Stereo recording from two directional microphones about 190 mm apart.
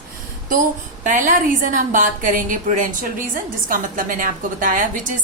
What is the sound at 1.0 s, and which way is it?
Speech, 45° right (ahead or behind).